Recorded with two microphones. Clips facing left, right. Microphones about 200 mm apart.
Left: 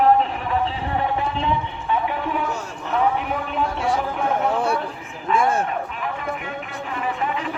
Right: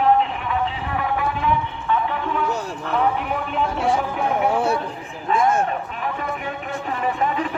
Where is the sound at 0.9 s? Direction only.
25° left (ahead or behind).